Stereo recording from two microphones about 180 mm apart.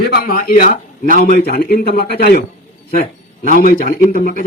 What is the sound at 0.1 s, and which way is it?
Speech, 55° left (ahead or behind).